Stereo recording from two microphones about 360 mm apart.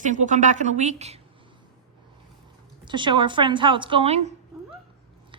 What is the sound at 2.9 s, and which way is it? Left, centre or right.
A woman's voice, centre.